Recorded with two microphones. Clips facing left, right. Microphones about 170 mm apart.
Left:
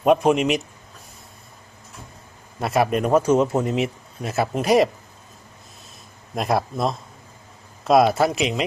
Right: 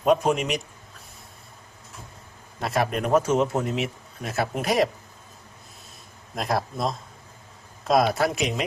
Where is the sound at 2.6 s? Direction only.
5° left (ahead or behind).